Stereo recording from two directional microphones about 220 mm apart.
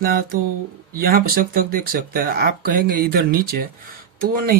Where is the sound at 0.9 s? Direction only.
45° right (ahead or behind).